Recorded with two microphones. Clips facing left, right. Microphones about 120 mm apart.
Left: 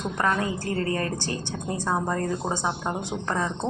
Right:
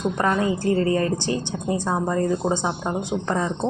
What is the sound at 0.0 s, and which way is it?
A woman's voice, 20° right (ahead or behind).